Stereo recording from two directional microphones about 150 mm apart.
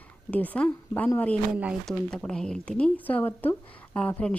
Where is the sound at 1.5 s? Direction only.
5° right (ahead or behind).